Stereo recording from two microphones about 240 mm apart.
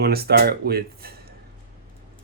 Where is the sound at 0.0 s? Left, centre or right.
Right.